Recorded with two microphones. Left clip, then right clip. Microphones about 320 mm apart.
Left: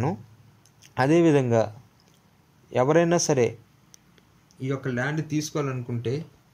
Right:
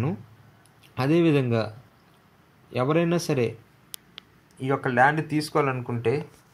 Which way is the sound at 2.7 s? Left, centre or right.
Left.